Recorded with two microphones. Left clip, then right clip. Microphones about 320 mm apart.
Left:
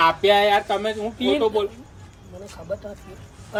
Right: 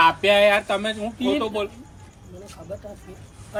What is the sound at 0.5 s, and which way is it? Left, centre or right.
Speech, right.